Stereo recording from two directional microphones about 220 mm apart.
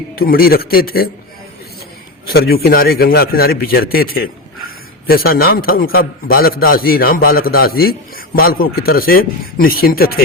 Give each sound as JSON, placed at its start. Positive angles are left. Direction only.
{"t": 0.2, "sound": "a man's voice", "side_deg": 40}
{"t": 2.2, "sound": "a man's voice", "side_deg": 45}